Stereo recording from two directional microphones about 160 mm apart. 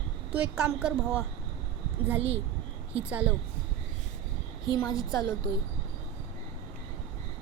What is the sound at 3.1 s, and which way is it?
Speech, 10° right (ahead or behind).